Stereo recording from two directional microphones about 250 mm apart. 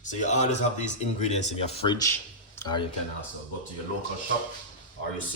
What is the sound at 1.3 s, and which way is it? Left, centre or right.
Speech, left.